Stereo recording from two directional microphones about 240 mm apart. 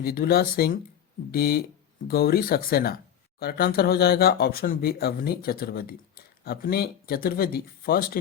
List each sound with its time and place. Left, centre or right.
0.0 s speech: left